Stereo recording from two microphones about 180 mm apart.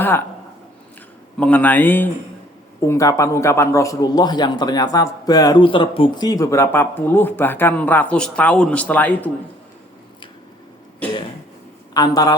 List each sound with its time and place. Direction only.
1.4 s a man's voice: 10° left (ahead or behind)
11.9 s a man's voice: 20° left (ahead or behind)